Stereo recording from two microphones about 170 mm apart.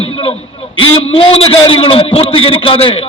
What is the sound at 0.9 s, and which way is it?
A man's voice, 35° left (ahead or behind).